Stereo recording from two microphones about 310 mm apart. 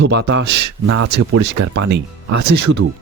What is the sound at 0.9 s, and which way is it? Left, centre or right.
Speech, right.